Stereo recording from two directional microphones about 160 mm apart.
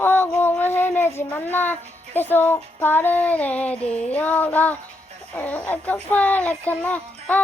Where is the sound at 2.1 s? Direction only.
10° left (ahead or behind).